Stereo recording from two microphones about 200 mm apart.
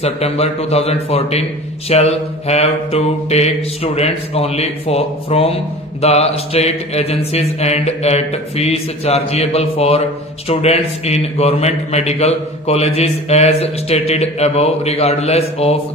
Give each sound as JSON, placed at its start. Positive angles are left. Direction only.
{"t": 0.0, "sound": "mantra", "side_deg": 30}